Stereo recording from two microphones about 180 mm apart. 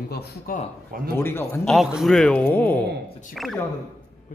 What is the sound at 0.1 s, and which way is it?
Speech, 60° left (ahead or behind).